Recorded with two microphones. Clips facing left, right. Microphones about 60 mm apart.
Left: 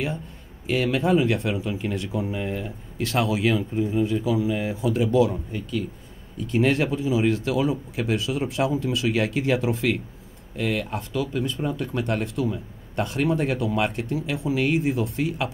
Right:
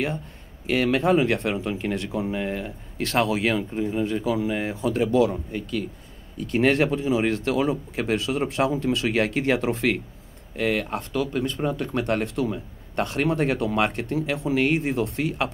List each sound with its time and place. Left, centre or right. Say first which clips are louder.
0.7 s speech: right 1 dB; right